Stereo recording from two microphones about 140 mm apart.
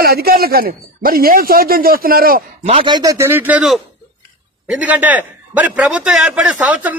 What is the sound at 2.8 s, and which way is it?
A man's voice, 30° right (ahead or behind).